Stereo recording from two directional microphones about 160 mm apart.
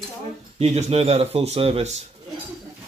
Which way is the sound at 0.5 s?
40° right (ahead or behind).